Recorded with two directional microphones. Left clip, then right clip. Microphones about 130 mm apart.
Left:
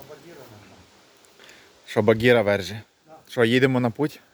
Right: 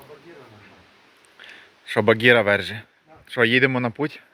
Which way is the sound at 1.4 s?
20° left (ahead or behind).